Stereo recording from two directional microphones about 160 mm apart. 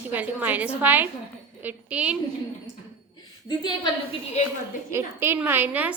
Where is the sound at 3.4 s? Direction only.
30° left (ahead or behind).